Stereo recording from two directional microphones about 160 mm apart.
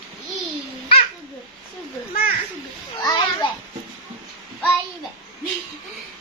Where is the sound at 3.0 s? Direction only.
25° left (ahead or behind).